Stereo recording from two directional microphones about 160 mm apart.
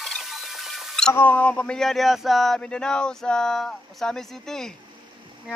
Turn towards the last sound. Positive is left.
turn(degrees=5)  # may be behind; listen again after turning